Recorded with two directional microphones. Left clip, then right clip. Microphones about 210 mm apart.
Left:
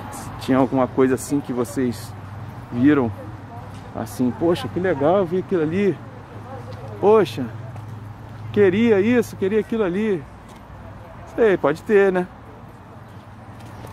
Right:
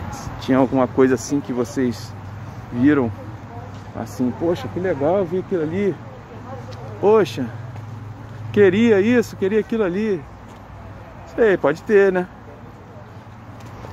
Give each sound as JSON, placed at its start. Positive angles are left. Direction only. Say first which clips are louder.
{"t": 0.4, "sound": "speech", "louder": "right 1 dB", "side_deg": 5}
{"t": 2.8, "sound": "speech", "louder": "even", "side_deg": 10}
{"t": 7.0, "sound": "speech", "louder": "even", "side_deg": 10}
{"t": 8.5, "sound": "speech", "louder": "right 2 dB", "side_deg": 0}
{"t": 11.3, "sound": "speech", "louder": "right 1 dB", "side_deg": 5}